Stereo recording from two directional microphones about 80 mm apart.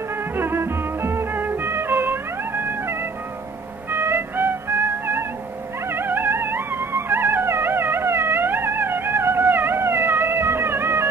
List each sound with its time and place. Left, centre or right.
0.4 s music: right